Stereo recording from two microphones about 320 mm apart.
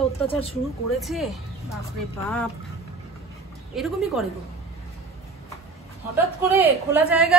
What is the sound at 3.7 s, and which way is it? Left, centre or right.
Speech, centre.